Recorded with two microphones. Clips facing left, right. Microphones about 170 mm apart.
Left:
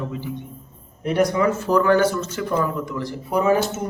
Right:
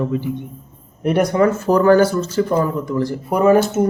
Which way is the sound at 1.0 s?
60° right (ahead or behind).